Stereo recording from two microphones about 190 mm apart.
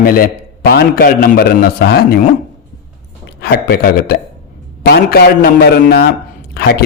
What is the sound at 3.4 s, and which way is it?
A man's voice, 50° left (ahead or behind).